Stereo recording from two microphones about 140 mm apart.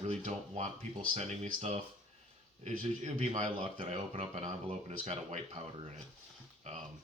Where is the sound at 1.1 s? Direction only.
50° right (ahead or behind).